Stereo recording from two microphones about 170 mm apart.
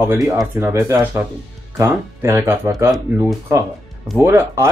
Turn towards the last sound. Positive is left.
turn(degrees=-20)  # may be behind; listen again after turning